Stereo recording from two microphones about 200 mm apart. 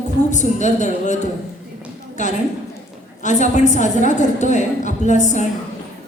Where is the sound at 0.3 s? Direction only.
35° left (ahead or behind).